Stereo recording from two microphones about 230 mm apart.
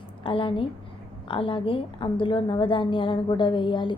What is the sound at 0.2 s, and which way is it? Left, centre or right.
A woman's voice, left.